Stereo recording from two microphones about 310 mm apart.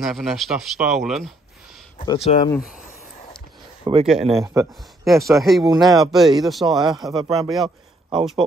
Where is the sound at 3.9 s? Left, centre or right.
Centre.